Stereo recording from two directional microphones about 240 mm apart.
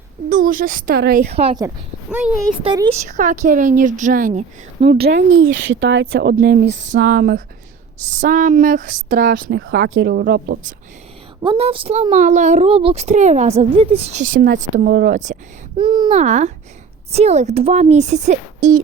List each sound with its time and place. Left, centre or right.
0.3 s a woman's voice: right
1.3 s speech: right
1.6 s speech: centre
2.6 s speech: centre
3.1 s a woman's voice: right
4.9 s speech: right
6.8 s a woman's voice: right
9.3 s speech: right
11.4 s speech: right
14.3 s speech: right
14.6 s a woman's voice: right
15.8 s speech: centre